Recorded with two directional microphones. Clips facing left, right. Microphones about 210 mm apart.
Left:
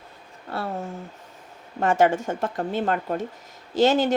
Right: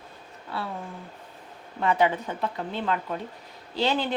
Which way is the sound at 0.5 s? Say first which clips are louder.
Left 4 dB; 45° left (ahead or behind).